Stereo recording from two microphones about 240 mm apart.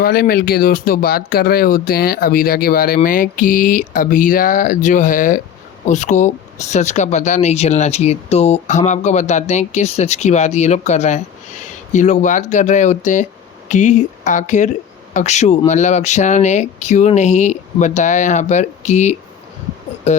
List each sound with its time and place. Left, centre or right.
0.0 s speech: left